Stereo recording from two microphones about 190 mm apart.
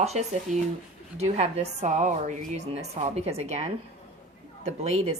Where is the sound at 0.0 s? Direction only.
35° right (ahead or behind).